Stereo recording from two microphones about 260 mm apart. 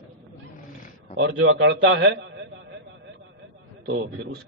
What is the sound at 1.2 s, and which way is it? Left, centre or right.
A man's voice, right.